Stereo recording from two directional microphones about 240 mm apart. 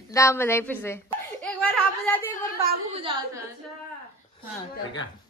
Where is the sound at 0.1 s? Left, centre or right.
Centre.